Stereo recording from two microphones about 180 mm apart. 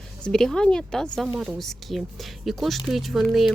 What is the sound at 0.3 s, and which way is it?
Speech, 5° left (ahead or behind).